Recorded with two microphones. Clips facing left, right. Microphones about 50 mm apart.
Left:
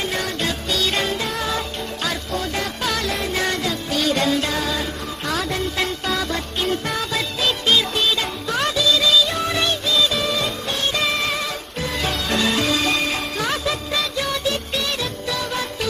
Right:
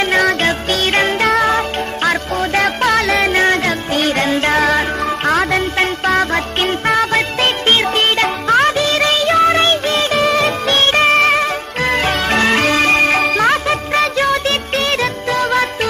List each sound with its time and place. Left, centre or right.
0.0 s music: right
1.2 s music: right
3.3 s music: right